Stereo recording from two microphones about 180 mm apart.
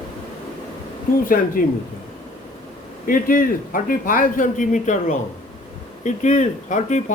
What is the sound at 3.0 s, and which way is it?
Speech, 50° left (ahead or behind).